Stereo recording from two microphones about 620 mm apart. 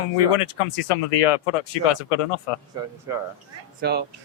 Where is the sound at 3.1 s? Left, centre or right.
Centre.